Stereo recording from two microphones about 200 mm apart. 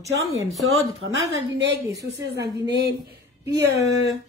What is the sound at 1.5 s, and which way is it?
A woman's voice, 65° right (ahead or behind).